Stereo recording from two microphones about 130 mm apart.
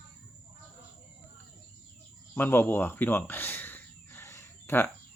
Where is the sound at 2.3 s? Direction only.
15° left (ahead or behind).